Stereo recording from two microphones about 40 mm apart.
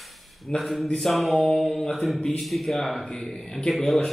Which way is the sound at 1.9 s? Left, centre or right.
Centre.